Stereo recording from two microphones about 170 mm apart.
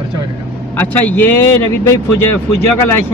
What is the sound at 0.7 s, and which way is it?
Speech, 10° left (ahead or behind).